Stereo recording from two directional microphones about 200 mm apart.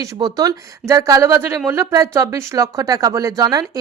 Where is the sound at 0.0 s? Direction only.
20° right (ahead or behind).